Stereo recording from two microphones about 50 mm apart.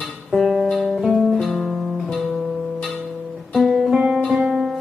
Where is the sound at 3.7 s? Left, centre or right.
Centre.